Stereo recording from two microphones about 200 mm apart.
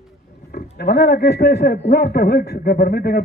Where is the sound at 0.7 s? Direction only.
55° left (ahead or behind).